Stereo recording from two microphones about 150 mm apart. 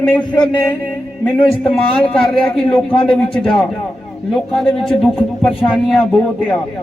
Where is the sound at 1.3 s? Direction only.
5° left (ahead or behind).